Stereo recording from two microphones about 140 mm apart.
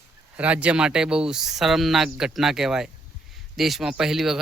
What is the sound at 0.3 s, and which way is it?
Speech, 10° right (ahead or behind).